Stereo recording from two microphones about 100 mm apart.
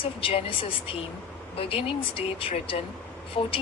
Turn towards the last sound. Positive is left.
turn(degrees=60)  # may be behind; listen again after turning